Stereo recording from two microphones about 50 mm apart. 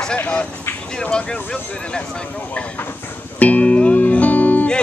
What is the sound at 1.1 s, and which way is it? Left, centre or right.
Speech, centre.